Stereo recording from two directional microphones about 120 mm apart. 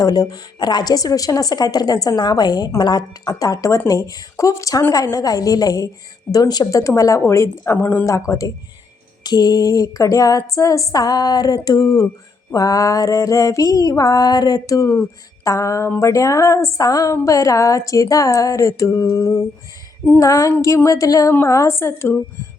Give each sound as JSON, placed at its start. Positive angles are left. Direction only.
{"t": 0.0, "sound": "a woman's voice", "side_deg": 35}